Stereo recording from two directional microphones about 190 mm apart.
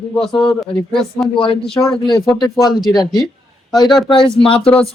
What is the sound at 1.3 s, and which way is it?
Speech, 25° left (ahead or behind).